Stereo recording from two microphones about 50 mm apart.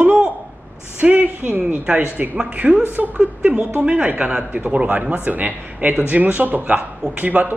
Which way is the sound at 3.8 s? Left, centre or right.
Right.